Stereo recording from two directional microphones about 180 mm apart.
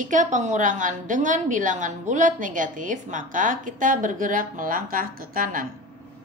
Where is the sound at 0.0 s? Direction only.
45° right (ahead or behind).